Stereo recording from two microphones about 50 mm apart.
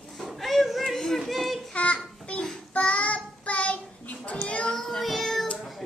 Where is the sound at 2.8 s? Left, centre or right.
Left.